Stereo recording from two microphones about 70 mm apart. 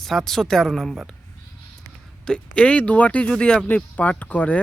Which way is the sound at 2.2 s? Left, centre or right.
Centre.